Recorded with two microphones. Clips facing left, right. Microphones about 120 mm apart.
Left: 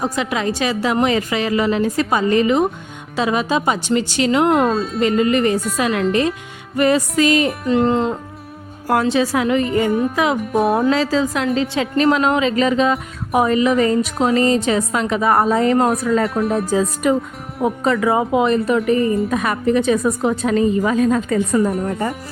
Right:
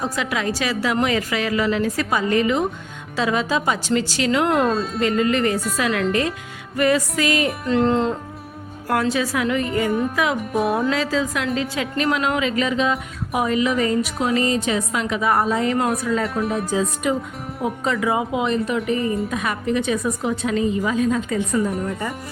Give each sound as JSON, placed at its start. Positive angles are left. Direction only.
{"t": 0.0, "sound": "a woman's voice", "side_deg": 25}
{"t": 4.5, "sound": "speech", "side_deg": 0}
{"t": 4.9, "sound": "a woman's voice", "side_deg": 25}
{"t": 7.7, "sound": "speech", "side_deg": 10}
{"t": 8.9, "sound": "a woman's voice", "side_deg": 25}
{"t": 10.4, "sound": "speech", "side_deg": 0}
{"t": 10.8, "sound": "a woman's voice", "side_deg": 30}
{"t": 15.4, "sound": "a woman's voice", "side_deg": 60}
{"t": 15.6, "sound": "a woman's voice", "side_deg": 40}
{"t": 16.0, "sound": "a woman's voice", "side_deg": 55}